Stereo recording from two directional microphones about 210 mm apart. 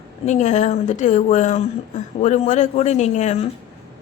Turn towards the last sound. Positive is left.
turn(degrees=35)  # may be behind; listen again after turning